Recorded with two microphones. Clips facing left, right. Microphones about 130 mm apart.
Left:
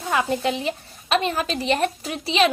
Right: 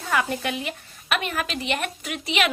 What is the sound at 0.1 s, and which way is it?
A woman's voice, 25° left (ahead or behind).